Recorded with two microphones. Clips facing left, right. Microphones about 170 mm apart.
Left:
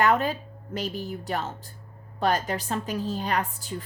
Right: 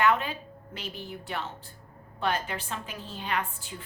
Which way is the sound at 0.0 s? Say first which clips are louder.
Left 3 dB; 40° left (ahead or behind).